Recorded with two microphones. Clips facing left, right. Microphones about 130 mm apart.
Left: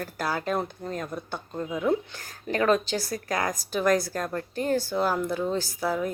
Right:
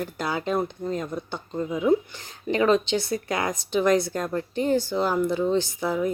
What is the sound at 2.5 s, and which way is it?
Speech, 20° right (ahead or behind).